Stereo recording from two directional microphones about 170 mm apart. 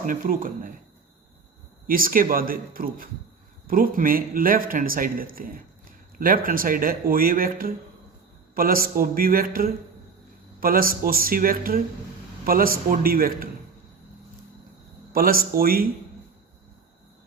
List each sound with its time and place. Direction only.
0.0 s speech: 55° right (ahead or behind)
1.9 s speech: 55° right (ahead or behind)
15.1 s speech: 60° right (ahead or behind)